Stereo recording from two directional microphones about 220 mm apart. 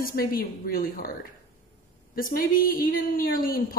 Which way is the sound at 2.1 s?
40° left (ahead or behind).